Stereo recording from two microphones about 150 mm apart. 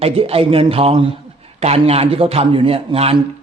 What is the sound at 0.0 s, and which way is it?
A man's voice, 40° right (ahead or behind).